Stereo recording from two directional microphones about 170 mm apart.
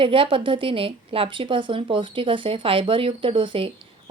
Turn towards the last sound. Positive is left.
turn(degrees=-30)  # may be behind; listen again after turning